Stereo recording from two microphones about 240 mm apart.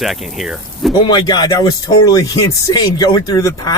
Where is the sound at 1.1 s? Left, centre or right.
Centre.